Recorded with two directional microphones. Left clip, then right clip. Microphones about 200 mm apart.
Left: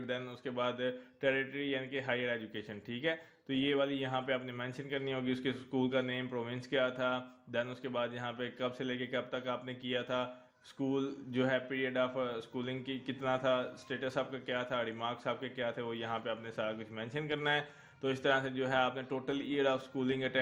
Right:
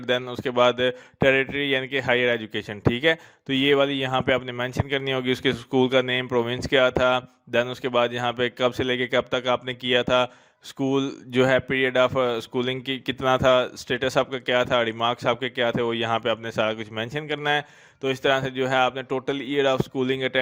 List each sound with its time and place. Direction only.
0.0 s speech: 50° right (ahead or behind)